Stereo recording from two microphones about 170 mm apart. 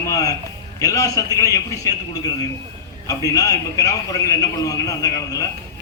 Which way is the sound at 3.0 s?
20° left (ahead or behind).